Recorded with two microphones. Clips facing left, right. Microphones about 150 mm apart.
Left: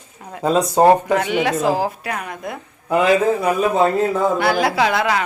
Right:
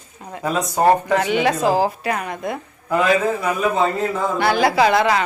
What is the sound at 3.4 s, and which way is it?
Speech, 35° left (ahead or behind).